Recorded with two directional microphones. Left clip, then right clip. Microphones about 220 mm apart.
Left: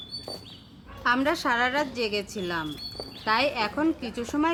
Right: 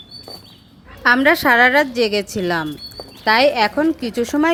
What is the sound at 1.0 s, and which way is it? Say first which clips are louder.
A woman's voice: right 11 dB; 20° right (ahead or behind).